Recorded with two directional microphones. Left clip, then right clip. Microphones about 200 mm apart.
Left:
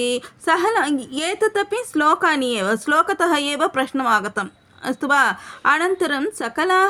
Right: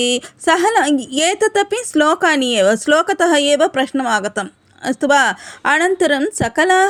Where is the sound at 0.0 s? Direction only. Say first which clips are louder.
Right 5 dB; 25° right (ahead or behind).